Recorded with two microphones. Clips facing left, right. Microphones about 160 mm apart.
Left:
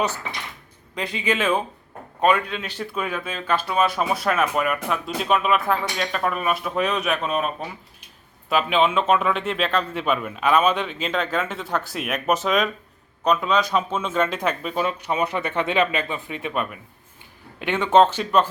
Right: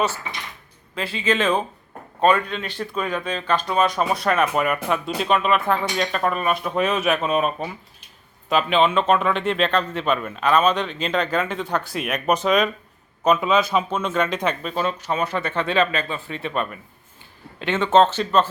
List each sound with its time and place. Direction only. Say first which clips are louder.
0.9 s speech: right 2 dB; 15° left (ahead or behind)